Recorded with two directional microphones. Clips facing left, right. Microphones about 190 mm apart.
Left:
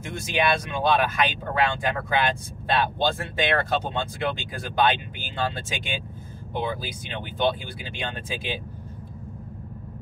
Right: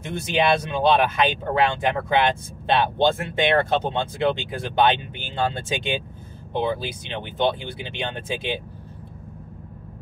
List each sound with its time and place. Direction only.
0.0 s speech: 30° right (ahead or behind)